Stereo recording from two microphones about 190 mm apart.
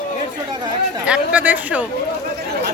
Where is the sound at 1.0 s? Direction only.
5° right (ahead or behind).